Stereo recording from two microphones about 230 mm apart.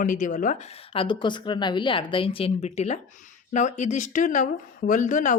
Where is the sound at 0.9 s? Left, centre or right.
Left.